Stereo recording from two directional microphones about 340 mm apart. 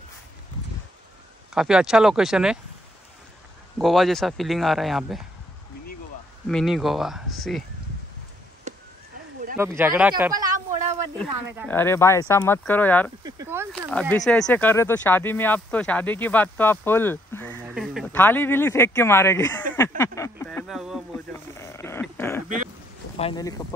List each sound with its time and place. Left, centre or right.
1.5 s speech: centre
3.7 s speech: centre
6.4 s speech: centre
8.7 s chop: centre
9.6 s speech: centre
11.4 s speech: centre
11.7 s speech: centre
13.2 s speech: centre
20.0 s a sound: centre
23.1 s speech: centre